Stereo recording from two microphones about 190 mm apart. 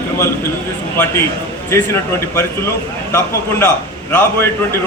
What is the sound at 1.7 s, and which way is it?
Speech, 15° left (ahead or behind).